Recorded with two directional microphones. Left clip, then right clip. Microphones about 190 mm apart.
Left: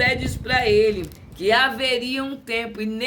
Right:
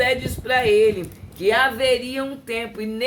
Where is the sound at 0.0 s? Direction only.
10° left (ahead or behind).